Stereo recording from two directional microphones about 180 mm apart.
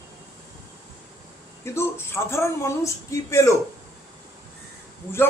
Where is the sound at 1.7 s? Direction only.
15° left (ahead or behind).